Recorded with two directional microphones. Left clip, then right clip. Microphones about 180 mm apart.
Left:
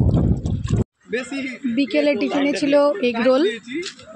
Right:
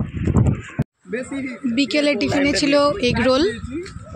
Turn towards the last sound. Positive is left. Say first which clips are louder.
# even
turn(degrees=-5)  # may be behind; listen again after turning